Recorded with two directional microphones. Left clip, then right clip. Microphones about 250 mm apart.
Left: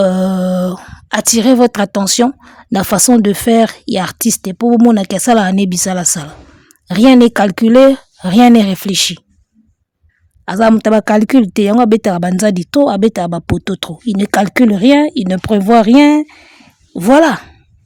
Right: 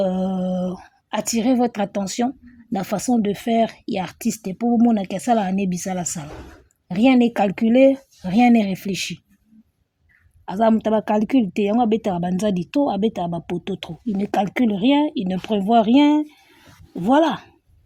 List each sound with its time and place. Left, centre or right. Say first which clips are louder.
0.0 s speech: left 10 dB; left
7.3 s speech: left 9 dB; left
10.4 s speech: left 8 dB; left